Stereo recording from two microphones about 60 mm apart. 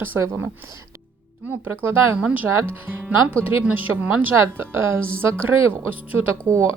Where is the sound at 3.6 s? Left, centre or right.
Right.